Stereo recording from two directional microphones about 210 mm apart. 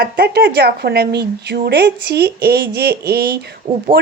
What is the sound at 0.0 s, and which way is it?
A woman's voice, 50° right (ahead or behind).